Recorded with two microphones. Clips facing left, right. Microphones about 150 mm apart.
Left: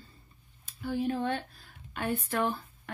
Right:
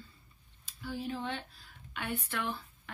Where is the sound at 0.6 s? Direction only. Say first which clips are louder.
Left 8 dB; 55° left (ahead or behind).